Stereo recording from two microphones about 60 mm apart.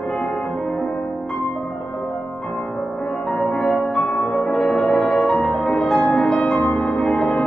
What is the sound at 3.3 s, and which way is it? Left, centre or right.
Music, centre.